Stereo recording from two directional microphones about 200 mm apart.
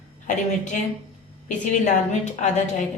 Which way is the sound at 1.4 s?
40° left (ahead or behind).